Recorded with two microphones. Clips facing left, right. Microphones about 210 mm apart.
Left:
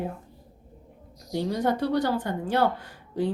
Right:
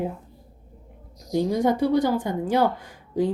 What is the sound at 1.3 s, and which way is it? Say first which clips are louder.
A woman's voice: right 4 dB; 15° right (ahead or behind).